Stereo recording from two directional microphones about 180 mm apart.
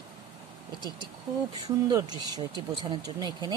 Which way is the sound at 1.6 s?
25° right (ahead or behind).